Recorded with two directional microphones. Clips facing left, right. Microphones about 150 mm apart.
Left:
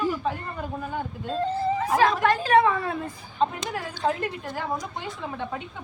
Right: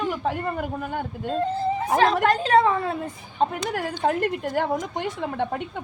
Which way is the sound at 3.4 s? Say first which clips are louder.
Right 2 dB; 60° right (ahead or behind).